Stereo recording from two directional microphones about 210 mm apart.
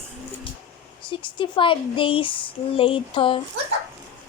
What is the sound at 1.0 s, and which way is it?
Speech, 25° left (ahead or behind).